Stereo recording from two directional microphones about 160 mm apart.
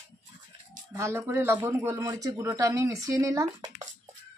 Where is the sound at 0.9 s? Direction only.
20° right (ahead or behind).